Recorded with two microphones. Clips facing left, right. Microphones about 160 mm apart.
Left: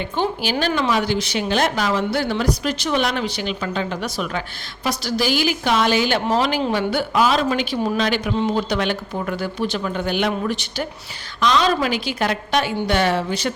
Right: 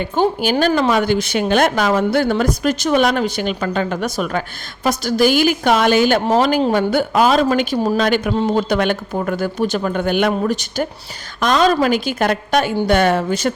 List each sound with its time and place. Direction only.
0.0 s speech: 50° right (ahead or behind)